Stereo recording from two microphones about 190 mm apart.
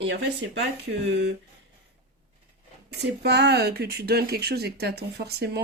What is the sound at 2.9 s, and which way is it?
Speech, 60° right (ahead or behind).